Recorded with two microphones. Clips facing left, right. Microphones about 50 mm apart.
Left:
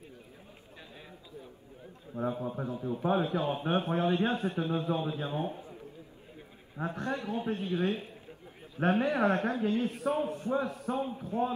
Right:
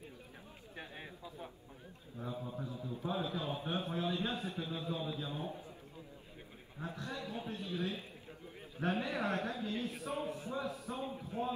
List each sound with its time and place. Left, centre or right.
2.1 s a man's voice: left
6.8 s a man's voice: left